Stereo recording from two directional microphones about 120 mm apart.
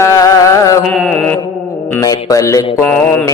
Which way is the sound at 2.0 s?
30° left (ahead or behind).